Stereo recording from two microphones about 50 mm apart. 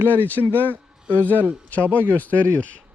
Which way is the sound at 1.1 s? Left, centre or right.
Left.